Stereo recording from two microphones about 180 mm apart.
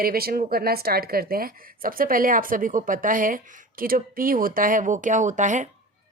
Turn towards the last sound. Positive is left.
turn(degrees=-45)  # may be behind; listen again after turning